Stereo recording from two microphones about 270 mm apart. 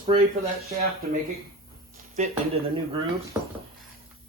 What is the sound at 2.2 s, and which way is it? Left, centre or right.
Speech, right.